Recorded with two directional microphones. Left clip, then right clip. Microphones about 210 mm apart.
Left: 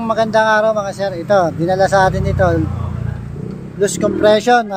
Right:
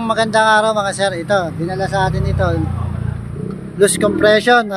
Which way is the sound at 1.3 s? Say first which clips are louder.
Left 4 dB; 15° left (ahead or behind).